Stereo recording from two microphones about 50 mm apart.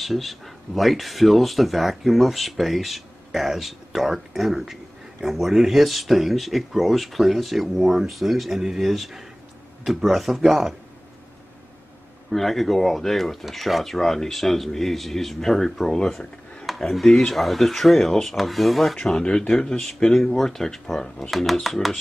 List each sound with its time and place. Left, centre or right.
0.0 s speech: centre
12.3 s speech: centre
18.9 s speech: centre